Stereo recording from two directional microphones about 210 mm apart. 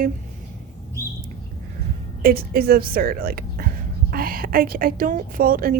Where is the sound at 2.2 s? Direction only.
45° right (ahead or behind).